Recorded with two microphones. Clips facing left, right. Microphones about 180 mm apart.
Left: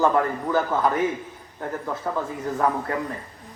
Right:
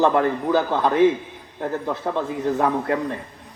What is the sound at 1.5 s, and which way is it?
A man's voice, 30° right (ahead or behind).